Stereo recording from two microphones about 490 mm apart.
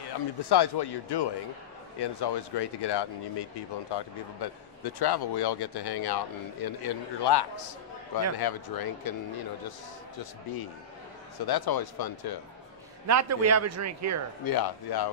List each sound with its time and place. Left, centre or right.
0.4 s speech: left
13.0 s a man's voice: right
14.4 s speech: left